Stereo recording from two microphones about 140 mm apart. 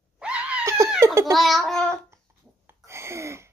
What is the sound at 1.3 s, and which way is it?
Speech, centre (ahead or behind).